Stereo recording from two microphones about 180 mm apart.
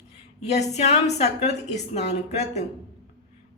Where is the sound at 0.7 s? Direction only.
40° left (ahead or behind).